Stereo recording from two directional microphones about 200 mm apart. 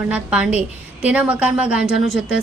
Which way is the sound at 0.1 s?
5° right (ahead or behind).